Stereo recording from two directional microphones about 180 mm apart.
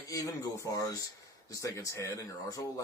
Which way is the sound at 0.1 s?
20° left (ahead or behind).